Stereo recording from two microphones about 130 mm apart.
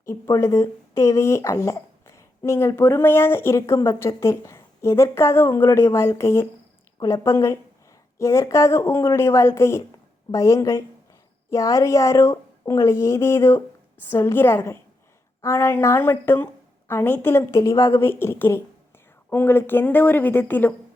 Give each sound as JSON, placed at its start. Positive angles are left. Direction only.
{"t": 0.0, "sound": "a woman's voice", "side_deg": 20}